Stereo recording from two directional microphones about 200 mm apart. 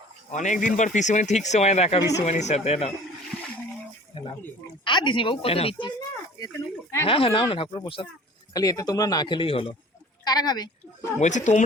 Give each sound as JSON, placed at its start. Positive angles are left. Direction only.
{"t": 0.3, "sound": "speech", "side_deg": 40}
{"t": 4.9, "sound": "speech", "side_deg": 25}
{"t": 7.1, "sound": "a woman's voice", "side_deg": 25}
{"t": 11.2, "sound": "speech", "side_deg": 35}